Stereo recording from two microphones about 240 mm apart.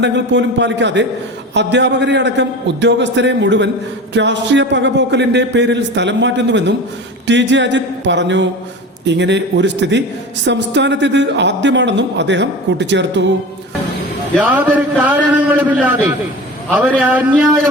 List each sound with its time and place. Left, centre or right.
0.0 s a woman's voice: right
14.3 s a man's voice: centre